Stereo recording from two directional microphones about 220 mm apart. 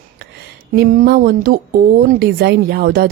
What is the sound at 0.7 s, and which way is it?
Speech, 40° right (ahead or behind).